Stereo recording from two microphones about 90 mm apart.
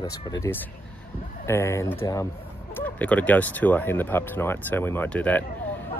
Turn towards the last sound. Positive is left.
turn(degrees=15)  # may be behind; listen again after turning